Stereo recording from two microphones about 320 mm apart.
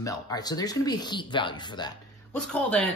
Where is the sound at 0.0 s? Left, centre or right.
Centre.